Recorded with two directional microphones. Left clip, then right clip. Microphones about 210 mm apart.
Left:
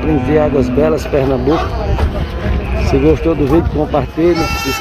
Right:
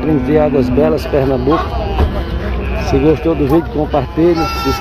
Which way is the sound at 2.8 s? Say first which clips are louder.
Even; 5° left (ahead or behind).